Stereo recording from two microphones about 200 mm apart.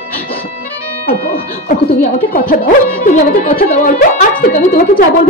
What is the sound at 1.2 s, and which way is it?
Music, 30° left (ahead or behind).